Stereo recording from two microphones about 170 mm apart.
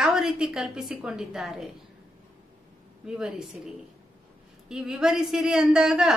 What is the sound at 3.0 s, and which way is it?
Speech, 5° right (ahead or behind).